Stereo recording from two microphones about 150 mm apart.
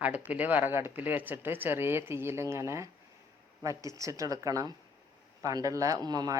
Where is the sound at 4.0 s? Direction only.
20° right (ahead or behind).